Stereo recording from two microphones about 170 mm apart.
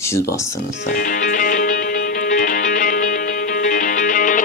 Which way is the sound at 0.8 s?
55° left (ahead or behind).